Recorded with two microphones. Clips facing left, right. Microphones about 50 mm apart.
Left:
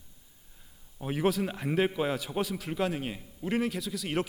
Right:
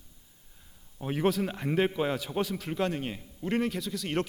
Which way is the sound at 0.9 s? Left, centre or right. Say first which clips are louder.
Right 1 dB; centre.